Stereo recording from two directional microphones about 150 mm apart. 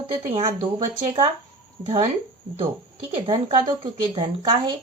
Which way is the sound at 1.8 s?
40° right (ahead or behind).